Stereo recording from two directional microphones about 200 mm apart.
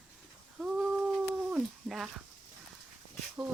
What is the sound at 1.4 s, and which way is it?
Speech, 5° right (ahead or behind).